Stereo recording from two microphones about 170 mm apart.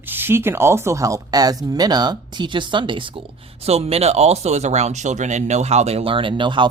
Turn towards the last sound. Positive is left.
turn(degrees=-30)  # may be behind; listen again after turning